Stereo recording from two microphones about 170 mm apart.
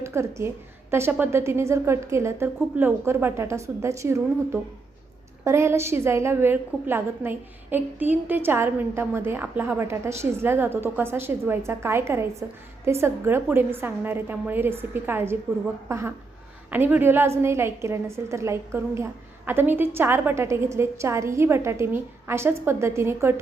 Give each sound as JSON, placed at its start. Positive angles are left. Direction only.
{"t": 0.0, "sound": "a woman's voice", "side_deg": -15}